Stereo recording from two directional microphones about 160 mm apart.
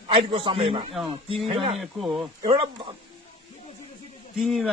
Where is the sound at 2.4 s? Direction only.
30° right (ahead or behind).